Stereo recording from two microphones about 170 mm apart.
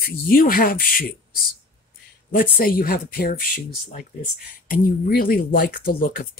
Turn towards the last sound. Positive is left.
turn(degrees=55)  # may be behind; listen again after turning